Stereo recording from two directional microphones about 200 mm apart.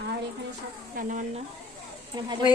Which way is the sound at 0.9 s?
40° right (ahead or behind).